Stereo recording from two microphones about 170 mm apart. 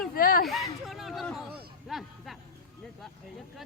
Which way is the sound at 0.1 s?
60° left (ahead or behind).